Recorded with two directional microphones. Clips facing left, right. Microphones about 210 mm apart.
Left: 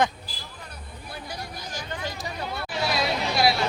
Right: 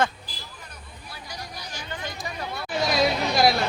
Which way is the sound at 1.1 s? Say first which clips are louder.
Left 3 dB; 55° left (ahead or behind).